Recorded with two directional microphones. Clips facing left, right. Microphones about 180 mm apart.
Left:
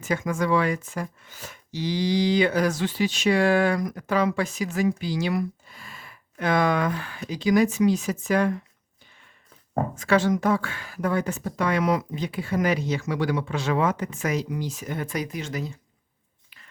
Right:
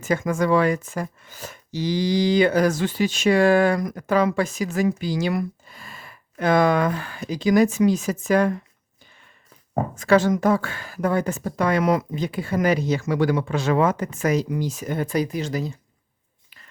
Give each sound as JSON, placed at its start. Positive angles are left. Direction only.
{"t": 0.0, "sound": "speech", "side_deg": -45}
{"t": 10.0, "sound": "speech", "side_deg": -40}